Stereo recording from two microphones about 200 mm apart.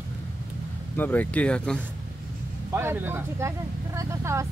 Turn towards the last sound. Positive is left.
turn(degrees=-15)  # may be behind; listen again after turning